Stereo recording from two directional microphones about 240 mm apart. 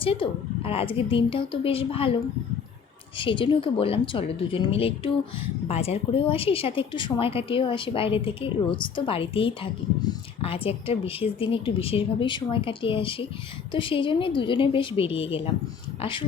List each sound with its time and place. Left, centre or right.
0.0 s a woman's voice: left
3.2 s a woman's voice: left